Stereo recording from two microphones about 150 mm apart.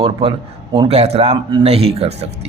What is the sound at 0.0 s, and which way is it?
A man's voice, 35° right (ahead or behind).